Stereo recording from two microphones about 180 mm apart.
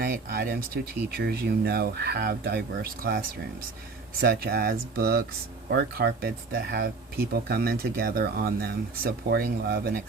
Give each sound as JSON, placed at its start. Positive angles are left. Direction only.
{"t": 0.0, "sound": "speech", "side_deg": -55}